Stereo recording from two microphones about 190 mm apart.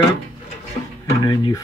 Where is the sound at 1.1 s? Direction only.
20° left (ahead or behind).